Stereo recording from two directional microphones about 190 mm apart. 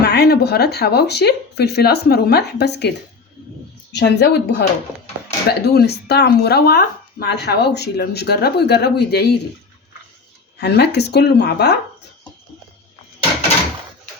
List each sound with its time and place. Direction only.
0.0 s speech: 60° left (ahead or behind)
3.9 s speech: 60° left (ahead or behind)
10.6 s speech: 60° left (ahead or behind)